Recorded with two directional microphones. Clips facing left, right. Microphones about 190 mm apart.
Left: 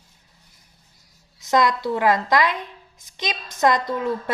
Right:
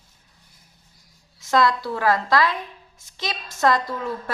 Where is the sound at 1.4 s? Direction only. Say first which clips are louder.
Even; 20° left (ahead or behind).